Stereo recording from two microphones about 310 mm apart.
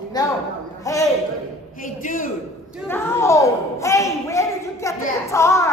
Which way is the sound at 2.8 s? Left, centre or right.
Centre.